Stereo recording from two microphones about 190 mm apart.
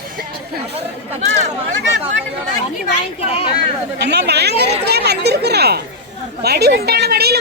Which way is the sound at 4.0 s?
60° right (ahead or behind).